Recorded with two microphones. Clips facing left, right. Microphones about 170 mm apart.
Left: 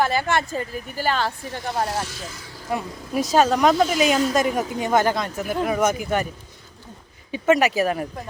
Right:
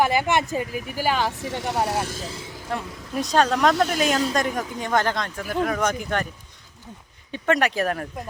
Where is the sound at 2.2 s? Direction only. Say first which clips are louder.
Right 3 dB; 30° right (ahead or behind).